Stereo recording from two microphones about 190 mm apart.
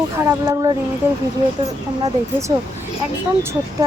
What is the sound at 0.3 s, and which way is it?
Speech, 15° right (ahead or behind).